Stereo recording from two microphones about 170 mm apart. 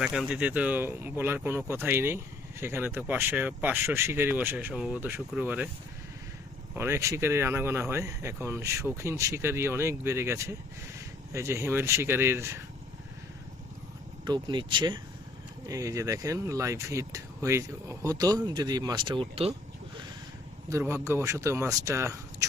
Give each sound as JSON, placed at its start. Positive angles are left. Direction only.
{"t": 0.0, "sound": "speech", "side_deg": -5}
{"t": 6.7, "sound": "speech", "side_deg": -15}
{"t": 14.3, "sound": "speech", "side_deg": -25}
{"t": 20.7, "sound": "speech", "side_deg": -15}